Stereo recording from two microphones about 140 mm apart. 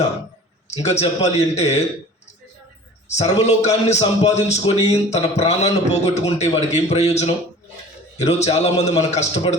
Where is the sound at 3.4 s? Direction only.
50° left (ahead or behind).